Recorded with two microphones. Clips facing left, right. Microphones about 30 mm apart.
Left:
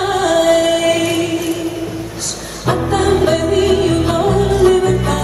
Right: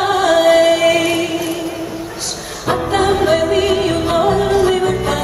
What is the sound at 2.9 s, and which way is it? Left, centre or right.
Music, centre.